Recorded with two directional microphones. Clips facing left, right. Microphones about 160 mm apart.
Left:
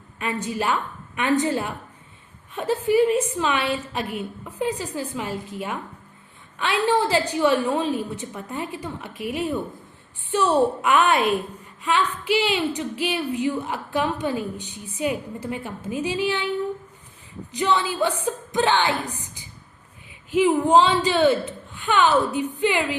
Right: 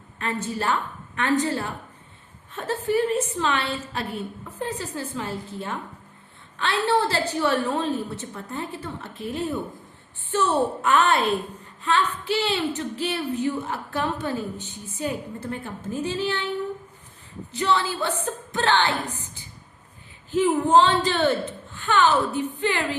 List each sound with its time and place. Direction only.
0.2 s a woman's voice: 15° left (ahead or behind)
17.5 s a woman's voice: 15° left (ahead or behind)